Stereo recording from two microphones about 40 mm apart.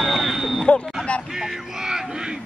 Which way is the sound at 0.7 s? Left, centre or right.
Left.